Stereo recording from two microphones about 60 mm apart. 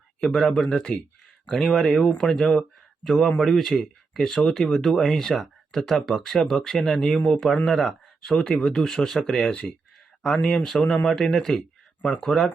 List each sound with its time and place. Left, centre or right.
0.2 s speech: centre
9.5 s speech: centre
10.2 s speech: centre